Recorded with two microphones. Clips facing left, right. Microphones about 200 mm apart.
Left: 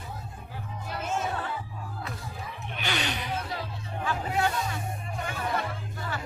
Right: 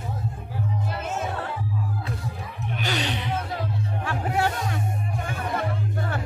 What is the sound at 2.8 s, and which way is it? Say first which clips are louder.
Music: right 3 dB; 35° right (ahead or behind).